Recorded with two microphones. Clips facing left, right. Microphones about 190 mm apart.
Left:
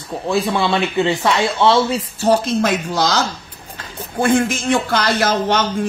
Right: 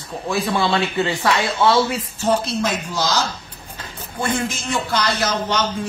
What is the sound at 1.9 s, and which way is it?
Speech, 40° left (ahead or behind).